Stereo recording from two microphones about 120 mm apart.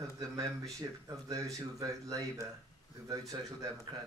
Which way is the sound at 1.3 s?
30° right (ahead or behind).